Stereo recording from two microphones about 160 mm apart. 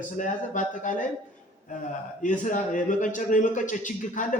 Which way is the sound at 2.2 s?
50° left (ahead or behind).